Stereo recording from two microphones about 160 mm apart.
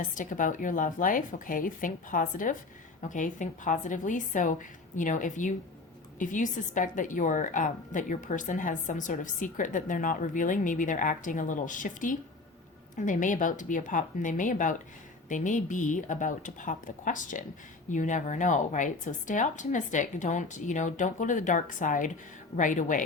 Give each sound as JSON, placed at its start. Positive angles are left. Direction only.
{"t": 0.0, "sound": "a woman's voice", "side_deg": 55}